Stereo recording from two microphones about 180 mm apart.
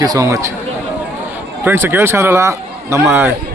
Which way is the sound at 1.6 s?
10° right (ahead or behind).